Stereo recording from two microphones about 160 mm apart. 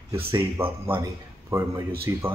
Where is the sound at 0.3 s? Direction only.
15° right (ahead or behind).